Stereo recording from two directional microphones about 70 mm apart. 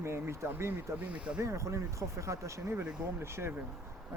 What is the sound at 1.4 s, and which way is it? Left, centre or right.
Speech, right.